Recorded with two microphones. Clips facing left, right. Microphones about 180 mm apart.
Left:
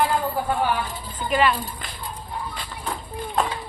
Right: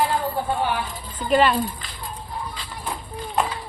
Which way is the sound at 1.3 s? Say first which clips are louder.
Right 3 dB; 35° right (ahead or behind).